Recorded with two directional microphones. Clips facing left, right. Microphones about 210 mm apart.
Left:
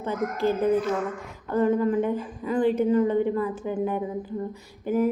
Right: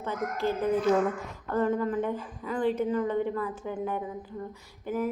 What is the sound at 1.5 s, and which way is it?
A woman's voice, 15° left (ahead or behind).